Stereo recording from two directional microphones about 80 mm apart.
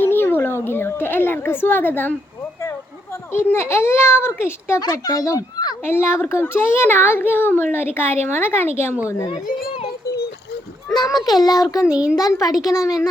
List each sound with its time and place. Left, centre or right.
0.0 s a sound: left
3.3 s a child's voice: left
4.8 s speech: left
5.8 s a child's voice: left
10.9 s a child's voice: left
11.9 s a child's voice: centre
12.2 s speech: left